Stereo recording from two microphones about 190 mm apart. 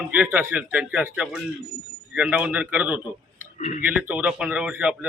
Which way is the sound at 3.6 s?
40° left (ahead or behind).